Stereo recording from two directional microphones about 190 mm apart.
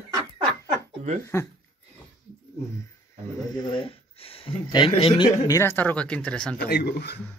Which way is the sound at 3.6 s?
25° left (ahead or behind).